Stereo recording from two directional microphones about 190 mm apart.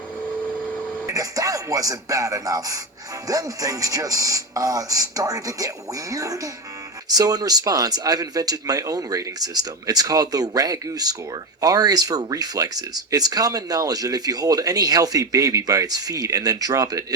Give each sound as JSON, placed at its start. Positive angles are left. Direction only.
{"t": 1.0, "sound": "speech", "side_deg": -20}